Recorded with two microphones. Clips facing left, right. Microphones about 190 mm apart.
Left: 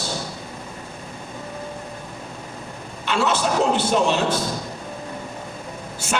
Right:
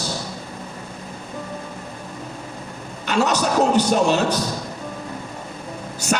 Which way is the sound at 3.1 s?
40° right (ahead or behind).